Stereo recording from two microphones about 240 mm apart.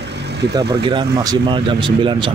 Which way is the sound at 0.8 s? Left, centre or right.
Right.